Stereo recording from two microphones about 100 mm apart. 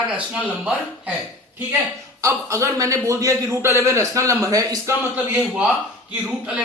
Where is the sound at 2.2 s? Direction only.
30° right (ahead or behind).